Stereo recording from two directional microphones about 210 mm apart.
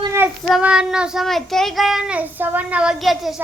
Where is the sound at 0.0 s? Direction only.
10° right (ahead or behind).